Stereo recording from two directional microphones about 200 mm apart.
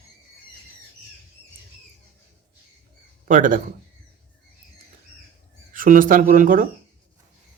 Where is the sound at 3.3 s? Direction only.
40° right (ahead or behind).